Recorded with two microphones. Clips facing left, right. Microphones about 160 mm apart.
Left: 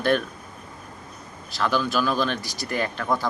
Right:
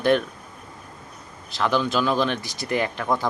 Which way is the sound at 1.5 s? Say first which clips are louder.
Right 1 dB; 20° right (ahead or behind).